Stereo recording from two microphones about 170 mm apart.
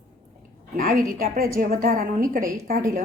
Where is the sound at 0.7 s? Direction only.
55° right (ahead or behind).